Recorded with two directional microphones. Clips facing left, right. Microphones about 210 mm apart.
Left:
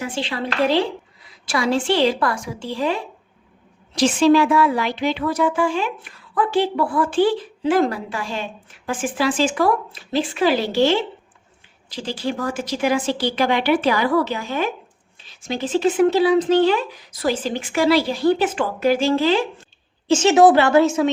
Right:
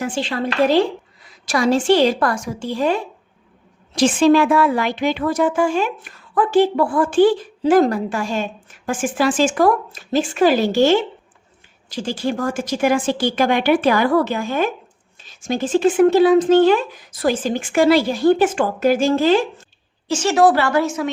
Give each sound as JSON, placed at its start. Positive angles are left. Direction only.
{"t": 0.0, "sound": "a woman's voice", "side_deg": -45}
{"t": 20.1, "sound": "a woman's voice", "side_deg": 20}